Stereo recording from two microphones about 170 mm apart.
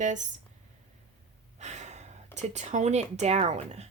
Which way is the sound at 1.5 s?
40° right (ahead or behind).